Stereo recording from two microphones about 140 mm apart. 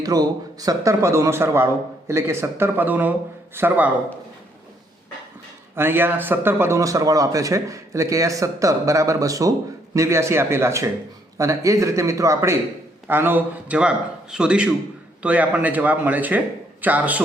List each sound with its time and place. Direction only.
0.0 s a man's voice: 25° right (ahead or behind)
5.7 s a man's voice: 15° right (ahead or behind)